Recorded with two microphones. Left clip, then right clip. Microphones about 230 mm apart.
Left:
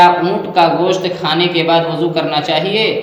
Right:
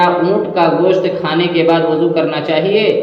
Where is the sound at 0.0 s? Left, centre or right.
Left.